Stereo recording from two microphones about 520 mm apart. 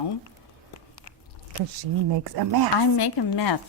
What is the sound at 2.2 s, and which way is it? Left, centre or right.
Speech, right.